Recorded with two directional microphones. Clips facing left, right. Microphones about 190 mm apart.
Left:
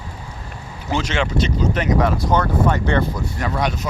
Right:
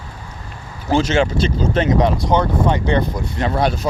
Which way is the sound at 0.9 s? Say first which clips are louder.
Right 5 dB; 30° right (ahead or behind).